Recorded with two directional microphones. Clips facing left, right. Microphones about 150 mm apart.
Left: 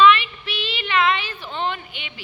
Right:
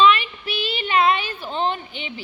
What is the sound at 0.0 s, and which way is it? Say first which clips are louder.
Child singing: left 1 dB; 40° right (ahead or behind).